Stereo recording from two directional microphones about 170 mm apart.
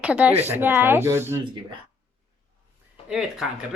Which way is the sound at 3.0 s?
5° right (ahead or behind).